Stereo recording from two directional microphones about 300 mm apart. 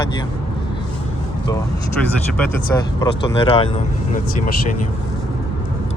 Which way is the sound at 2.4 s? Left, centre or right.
Centre.